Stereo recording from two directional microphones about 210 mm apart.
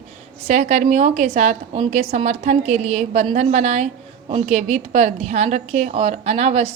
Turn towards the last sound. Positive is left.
turn(degrees=-30)  # may be behind; listen again after turning